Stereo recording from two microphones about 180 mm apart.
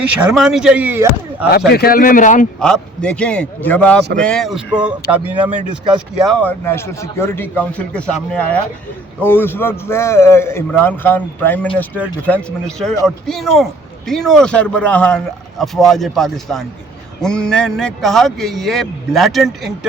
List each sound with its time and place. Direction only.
0.3 s speech: centre (ahead or behind)
1.7 s speech: 55° left (ahead or behind)
2.6 s a man's voice: 5° left (ahead or behind)
5.9 s a man's voice: 5° left (ahead or behind)